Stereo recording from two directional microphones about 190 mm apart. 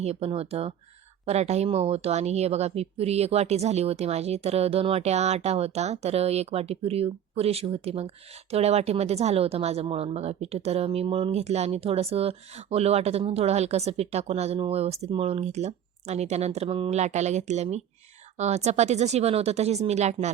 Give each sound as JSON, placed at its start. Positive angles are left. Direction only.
{"t": 0.0, "sound": "speech", "side_deg": -30}